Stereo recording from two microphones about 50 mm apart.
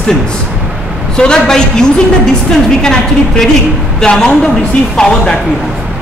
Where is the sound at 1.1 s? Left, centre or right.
Centre.